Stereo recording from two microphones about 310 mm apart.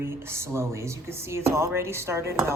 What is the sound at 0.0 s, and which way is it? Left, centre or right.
Speech, centre.